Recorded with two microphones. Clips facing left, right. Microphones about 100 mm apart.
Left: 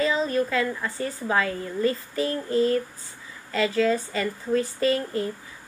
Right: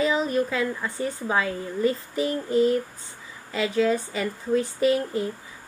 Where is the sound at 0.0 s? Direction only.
15° right (ahead or behind).